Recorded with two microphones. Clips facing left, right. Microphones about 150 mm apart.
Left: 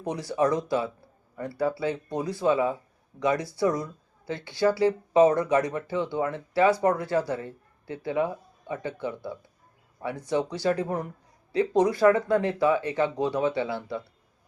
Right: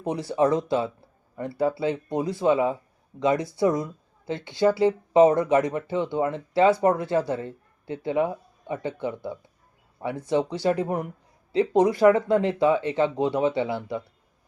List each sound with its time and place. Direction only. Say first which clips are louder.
0.0 s speech: right 3 dB; 25° right (ahead or behind)